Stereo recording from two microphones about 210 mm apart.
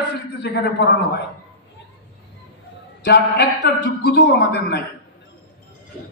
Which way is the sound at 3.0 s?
55° left (ahead or behind).